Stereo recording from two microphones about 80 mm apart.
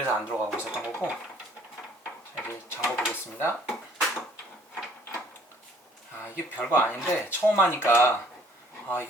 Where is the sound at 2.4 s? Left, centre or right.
Left.